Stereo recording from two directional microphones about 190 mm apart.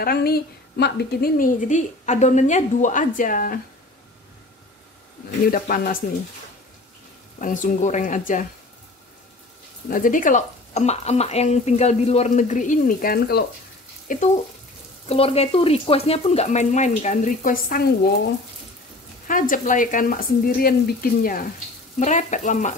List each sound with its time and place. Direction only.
0.0 s a woman's voice: 55° left (ahead or behind)
5.5 s a woman's voice: 50° left (ahead or behind)
7.3 s speech: 40° left (ahead or behind)
9.8 s a woman's voice: 45° left (ahead or behind)
15.0 s speech: 30° left (ahead or behind); by 17.8 s 50° left (ahead or behind)
19.2 s a woman's voice: 45° left (ahead or behind)